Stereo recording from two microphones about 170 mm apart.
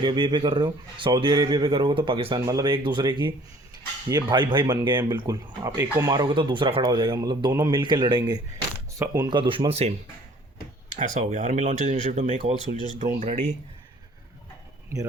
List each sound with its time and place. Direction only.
0.0 s speech: 30° right (ahead or behind)
10.9 s speech: 45° right (ahead or behind)